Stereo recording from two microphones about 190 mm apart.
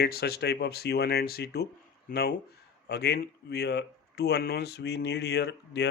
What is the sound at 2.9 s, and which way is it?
Speech, 60° left (ahead or behind).